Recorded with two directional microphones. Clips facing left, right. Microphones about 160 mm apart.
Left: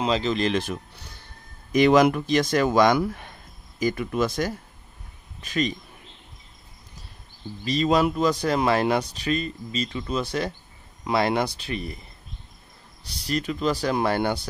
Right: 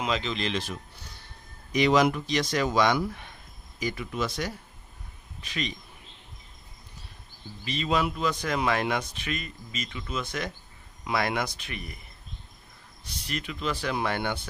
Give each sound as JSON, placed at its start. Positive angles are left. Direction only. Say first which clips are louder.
{"t": 0.0, "sound": "speech", "louder": "left 5 dB", "side_deg": 30}
{"t": 0.3, "sound": "speech", "louder": "left 7 dB", "side_deg": 45}
{"t": 7.6, "sound": "speech", "louder": "left 6 dB", "side_deg": 40}
{"t": 13.0, "sound": "speech", "louder": "left 8 dB", "side_deg": 35}